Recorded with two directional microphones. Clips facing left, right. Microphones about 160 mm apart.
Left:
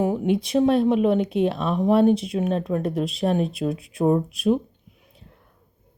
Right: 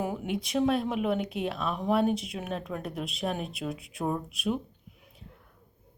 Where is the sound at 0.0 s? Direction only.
30° left (ahead or behind).